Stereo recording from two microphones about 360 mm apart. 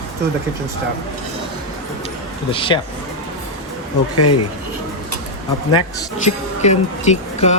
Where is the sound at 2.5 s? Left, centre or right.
Centre.